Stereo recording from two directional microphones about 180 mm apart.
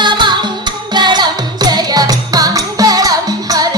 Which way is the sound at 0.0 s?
25° right (ahead or behind).